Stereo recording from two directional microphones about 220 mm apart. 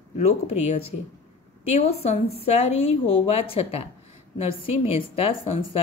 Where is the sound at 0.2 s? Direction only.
30° left (ahead or behind).